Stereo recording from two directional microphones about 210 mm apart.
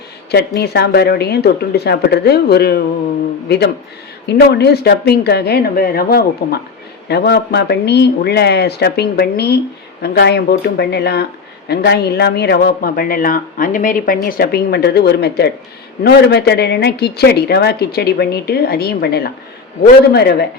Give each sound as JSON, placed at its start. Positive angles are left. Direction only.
{"t": 0.3, "sound": "speech", "side_deg": 50}
{"t": 4.3, "sound": "speech", "side_deg": 50}